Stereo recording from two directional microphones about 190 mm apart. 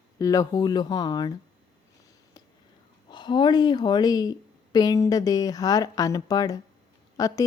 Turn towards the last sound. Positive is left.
turn(degrees=20)  # may be behind; listen again after turning